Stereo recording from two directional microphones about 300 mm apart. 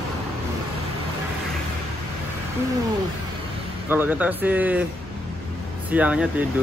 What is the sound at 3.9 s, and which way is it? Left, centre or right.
Speech, centre.